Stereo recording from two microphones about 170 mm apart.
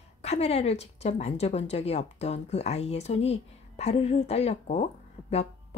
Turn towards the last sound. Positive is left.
turn(degrees=40)  # may be behind; listen again after turning